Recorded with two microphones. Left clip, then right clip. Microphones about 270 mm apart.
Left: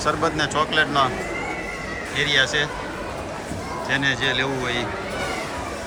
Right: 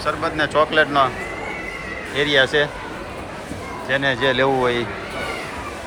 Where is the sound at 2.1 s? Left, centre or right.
Centre.